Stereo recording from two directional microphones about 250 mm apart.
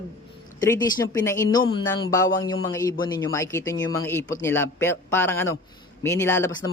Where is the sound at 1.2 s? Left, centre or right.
Centre.